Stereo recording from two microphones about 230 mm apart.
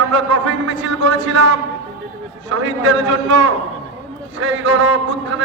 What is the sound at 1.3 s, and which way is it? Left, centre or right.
Speech, right.